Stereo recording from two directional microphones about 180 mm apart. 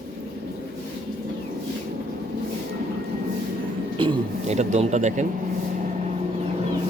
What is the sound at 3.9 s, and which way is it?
Speech, 35° right (ahead or behind).